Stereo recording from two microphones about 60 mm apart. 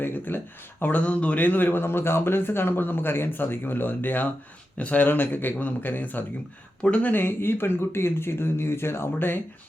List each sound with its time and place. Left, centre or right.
0.0 s speech: left
7.1 s speech: left